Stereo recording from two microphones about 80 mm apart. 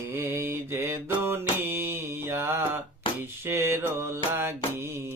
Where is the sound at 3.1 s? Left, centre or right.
Left.